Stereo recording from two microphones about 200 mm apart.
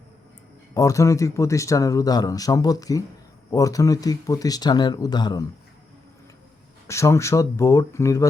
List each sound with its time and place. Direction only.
0.7 s speech: 15° left (ahead or behind)
6.8 s speech: 15° left (ahead or behind)